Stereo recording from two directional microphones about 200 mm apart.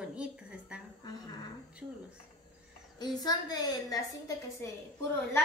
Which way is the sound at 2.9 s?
20° left (ahead or behind).